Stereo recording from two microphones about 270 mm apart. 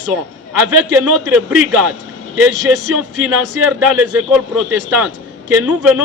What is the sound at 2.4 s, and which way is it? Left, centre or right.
Speech, right.